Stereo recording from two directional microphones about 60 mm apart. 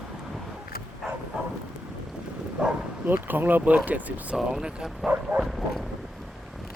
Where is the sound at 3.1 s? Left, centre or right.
Right.